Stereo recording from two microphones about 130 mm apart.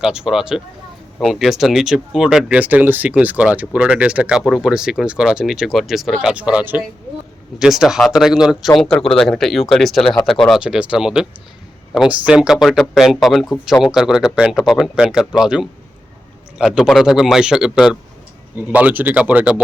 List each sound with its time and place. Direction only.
0.0 s speech: 5° right (ahead or behind)